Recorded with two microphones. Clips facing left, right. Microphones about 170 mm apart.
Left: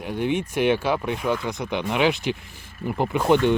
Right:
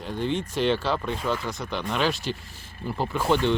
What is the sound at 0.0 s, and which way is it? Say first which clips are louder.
Speech: left 3 dB; 15° left (ahead or behind).